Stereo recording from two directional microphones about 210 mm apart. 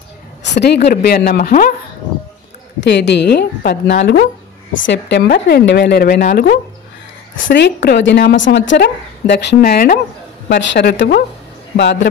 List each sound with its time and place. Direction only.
0.4 s a sound: 55° left (ahead or behind)
0.8 s a woman's voice: 50° left (ahead or behind)
2.8 s a woman's voice: 55° left (ahead or behind)
10.5 s a woman's voice: 55° left (ahead or behind)